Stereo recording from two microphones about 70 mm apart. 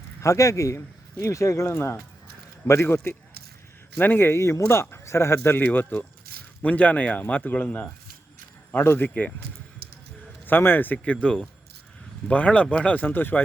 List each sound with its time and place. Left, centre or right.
0.2 s a man's voice: left
10.4 s a man's voice: left